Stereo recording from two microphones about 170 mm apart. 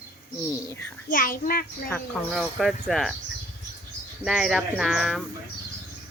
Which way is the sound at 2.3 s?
Centre (ahead or behind).